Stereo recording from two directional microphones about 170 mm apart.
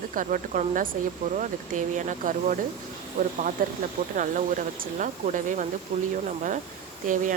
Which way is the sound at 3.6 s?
55° right (ahead or behind).